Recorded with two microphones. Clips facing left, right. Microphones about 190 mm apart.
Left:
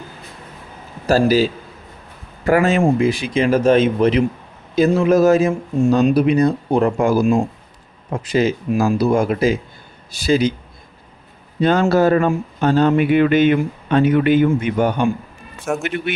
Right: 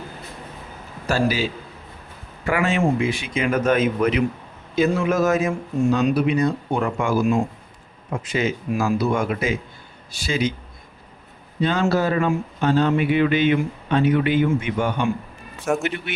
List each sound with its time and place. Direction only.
1.0 s speech: 40° left (ahead or behind)
2.5 s speech: 40° left (ahead or behind)
11.6 s speech: 45° left (ahead or behind)
15.6 s speech: centre (ahead or behind)